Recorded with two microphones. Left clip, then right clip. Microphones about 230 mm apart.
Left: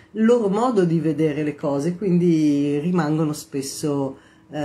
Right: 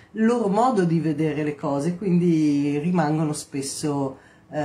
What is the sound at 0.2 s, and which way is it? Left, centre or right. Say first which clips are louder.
Speech: left 2 dB; centre.